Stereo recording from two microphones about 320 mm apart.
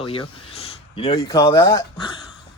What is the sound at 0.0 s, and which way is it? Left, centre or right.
A man's voice, centre.